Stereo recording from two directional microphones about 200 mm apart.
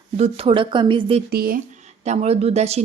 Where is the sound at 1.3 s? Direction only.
50° right (ahead or behind).